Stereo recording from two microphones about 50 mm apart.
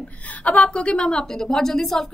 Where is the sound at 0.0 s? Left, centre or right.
Left.